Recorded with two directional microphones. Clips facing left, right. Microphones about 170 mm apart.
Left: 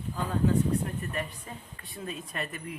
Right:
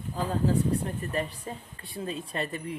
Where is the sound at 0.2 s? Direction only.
35° right (ahead or behind).